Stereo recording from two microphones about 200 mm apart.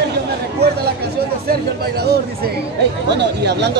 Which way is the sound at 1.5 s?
55° right (ahead or behind).